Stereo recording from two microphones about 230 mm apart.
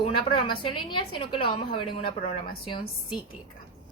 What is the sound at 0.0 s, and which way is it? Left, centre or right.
A woman's voice, left.